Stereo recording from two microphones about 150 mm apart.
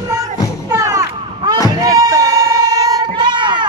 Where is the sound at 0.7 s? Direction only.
20° right (ahead or behind).